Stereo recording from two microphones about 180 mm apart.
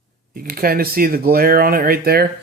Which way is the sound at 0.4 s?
55° right (ahead or behind).